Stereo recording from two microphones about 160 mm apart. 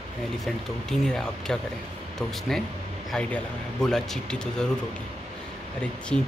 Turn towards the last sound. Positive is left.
turn(degrees=5)  # may be behind; listen again after turning